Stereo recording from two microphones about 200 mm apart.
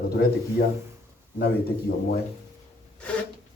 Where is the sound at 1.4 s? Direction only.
50° left (ahead or behind).